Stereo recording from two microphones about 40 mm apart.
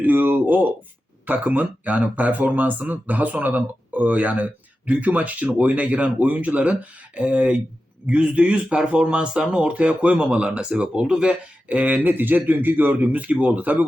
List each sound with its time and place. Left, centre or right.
0.0 s speech: right
11.7 s speech: right
12.9 s speech: right